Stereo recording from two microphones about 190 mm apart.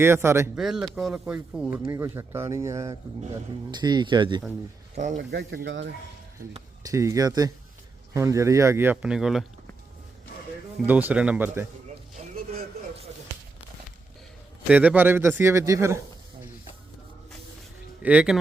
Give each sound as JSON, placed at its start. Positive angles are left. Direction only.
{"t": 0.0, "sound": "speech", "side_deg": -15}
{"t": 0.5, "sound": "speech", "side_deg": 0}
{"t": 5.1, "sound": "speech", "side_deg": -65}
{"t": 6.8, "sound": "speech", "side_deg": -15}
{"t": 10.8, "sound": "speech", "side_deg": -10}
{"t": 14.7, "sound": "speech", "side_deg": -10}
{"t": 18.0, "sound": "speech", "side_deg": -5}